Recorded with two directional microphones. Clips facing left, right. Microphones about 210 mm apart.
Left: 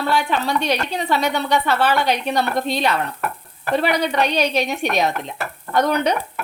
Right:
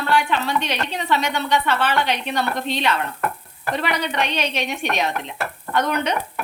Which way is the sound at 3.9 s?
35° left (ahead or behind).